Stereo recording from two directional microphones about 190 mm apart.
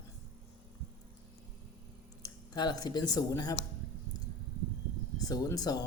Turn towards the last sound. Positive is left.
turn(degrees=20)  # may be behind; listen again after turning